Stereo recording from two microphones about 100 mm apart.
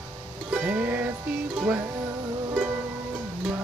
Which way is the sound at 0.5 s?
15° right (ahead or behind).